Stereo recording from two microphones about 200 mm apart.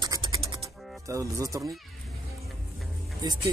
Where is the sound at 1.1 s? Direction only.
15° right (ahead or behind).